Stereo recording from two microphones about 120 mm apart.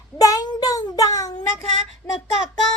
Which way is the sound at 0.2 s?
30° left (ahead or behind).